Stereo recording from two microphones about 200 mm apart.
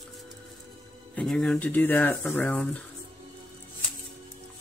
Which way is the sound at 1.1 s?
5° left (ahead or behind).